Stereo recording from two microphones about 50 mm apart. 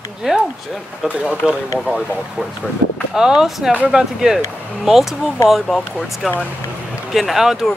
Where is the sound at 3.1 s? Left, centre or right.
Centre.